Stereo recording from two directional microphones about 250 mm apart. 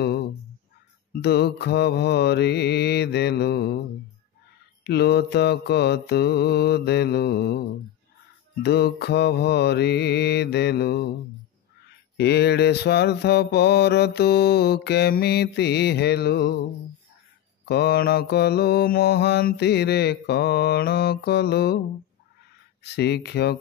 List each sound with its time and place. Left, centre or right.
1.1 s mantra: left
4.8 s mantra: left
8.6 s mantra: left
12.2 s mantra: left
17.6 s mantra: left
22.8 s mantra: left